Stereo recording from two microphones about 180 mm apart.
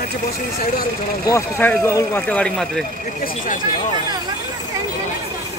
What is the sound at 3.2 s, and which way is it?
Speech, 50° left (ahead or behind).